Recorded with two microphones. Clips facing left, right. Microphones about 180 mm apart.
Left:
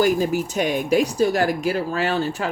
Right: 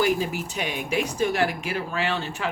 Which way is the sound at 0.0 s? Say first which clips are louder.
Left 5 dB; 40° left (ahead or behind).